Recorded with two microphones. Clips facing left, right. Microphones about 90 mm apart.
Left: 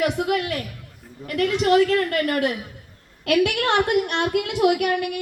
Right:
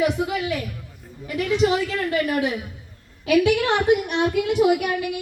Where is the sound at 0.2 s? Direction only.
65° left (ahead or behind).